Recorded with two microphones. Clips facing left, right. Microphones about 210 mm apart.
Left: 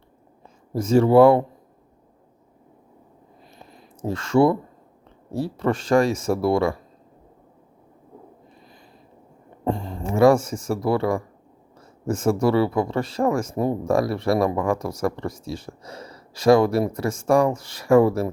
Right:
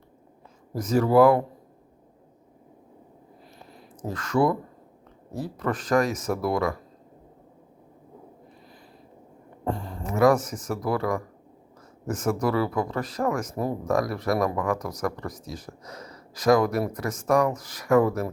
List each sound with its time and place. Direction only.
0.7 s speech: 25° left (ahead or behind)
3.6 s a sound: 25° left (ahead or behind)
5.3 s speech: 30° left (ahead or behind)
9.6 s speech: 25° left (ahead or behind)